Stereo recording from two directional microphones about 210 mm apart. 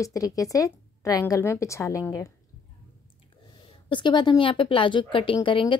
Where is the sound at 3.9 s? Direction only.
20° left (ahead or behind).